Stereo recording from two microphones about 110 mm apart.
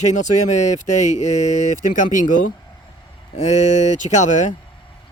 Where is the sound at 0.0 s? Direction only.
90° left.